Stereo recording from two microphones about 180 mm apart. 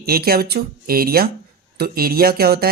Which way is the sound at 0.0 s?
60° right (ahead or behind).